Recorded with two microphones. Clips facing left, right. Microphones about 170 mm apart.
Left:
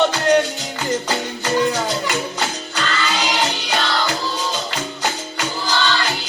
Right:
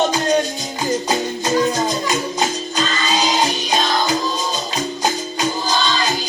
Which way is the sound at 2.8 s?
65° left (ahead or behind).